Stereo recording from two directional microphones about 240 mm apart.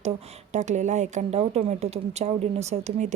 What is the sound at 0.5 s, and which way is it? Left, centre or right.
Speech, right.